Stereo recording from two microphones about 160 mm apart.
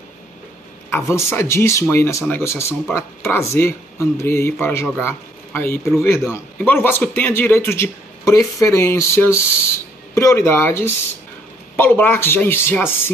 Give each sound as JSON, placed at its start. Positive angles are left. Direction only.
{"t": 0.8, "sound": "speech", "side_deg": 15}